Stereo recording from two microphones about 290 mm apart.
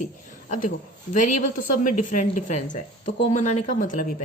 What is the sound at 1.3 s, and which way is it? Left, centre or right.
A woman's voice, left.